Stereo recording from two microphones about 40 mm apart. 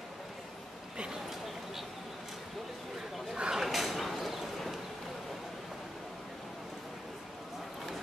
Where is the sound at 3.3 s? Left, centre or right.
Centre.